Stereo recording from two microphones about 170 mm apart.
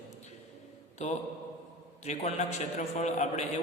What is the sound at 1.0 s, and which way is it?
A man's voice, 45° left (ahead or behind).